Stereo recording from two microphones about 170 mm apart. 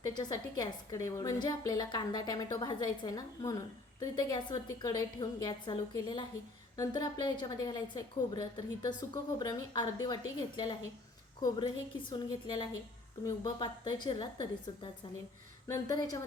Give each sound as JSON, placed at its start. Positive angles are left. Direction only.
{"t": 0.0, "sound": "a woman's voice", "side_deg": 25}
{"t": 11.3, "sound": "a woman's voice", "side_deg": 25}
{"t": 15.6, "sound": "a woman's voice", "side_deg": 20}